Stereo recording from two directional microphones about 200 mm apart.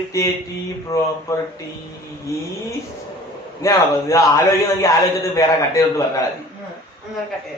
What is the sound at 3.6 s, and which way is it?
A man's voice, 15° left (ahead or behind).